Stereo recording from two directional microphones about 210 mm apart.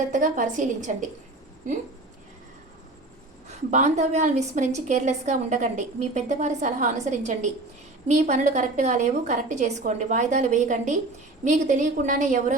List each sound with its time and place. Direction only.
0.1 s a woman's voice: 35° right (ahead or behind)
3.5 s a woman's voice: 35° right (ahead or behind)